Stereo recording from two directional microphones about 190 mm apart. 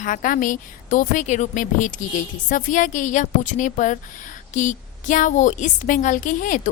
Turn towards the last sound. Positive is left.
turn(degrees=45)  # may be behind; listen again after turning